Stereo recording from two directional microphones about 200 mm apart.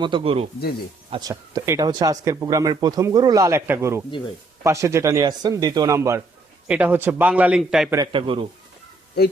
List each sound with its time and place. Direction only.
0.0 s a man's voice: 25° right (ahead or behind); by 7.9 s 5° right (ahead or behind)
7.9 s a man's voice: 25° right (ahead or behind)